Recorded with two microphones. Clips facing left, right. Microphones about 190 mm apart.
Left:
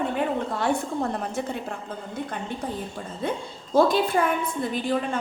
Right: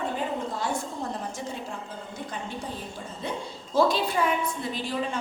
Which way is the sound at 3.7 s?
50° left (ahead or behind).